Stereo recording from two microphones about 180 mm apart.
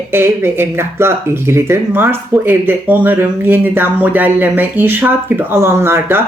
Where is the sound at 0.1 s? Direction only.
15° right (ahead or behind).